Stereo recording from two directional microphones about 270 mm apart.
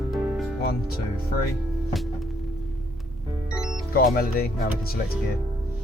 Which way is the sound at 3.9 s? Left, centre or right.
Left.